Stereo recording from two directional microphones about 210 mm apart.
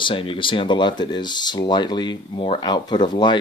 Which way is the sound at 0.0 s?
25° left (ahead or behind).